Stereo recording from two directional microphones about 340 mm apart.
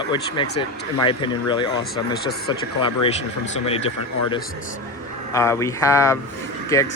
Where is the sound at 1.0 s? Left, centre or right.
Centre.